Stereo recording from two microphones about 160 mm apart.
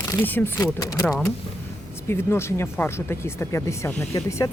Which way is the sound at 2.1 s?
15° left (ahead or behind).